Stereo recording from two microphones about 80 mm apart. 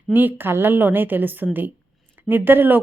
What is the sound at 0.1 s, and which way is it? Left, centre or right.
A woman's voice, right.